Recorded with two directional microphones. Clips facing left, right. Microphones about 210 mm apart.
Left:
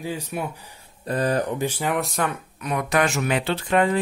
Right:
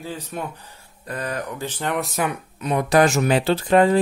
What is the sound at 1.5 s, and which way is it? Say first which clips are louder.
Speech: left 1 dB; 10° left (ahead or behind).